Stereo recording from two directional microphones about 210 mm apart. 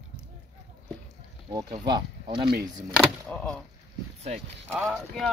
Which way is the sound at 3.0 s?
Centre (ahead or behind).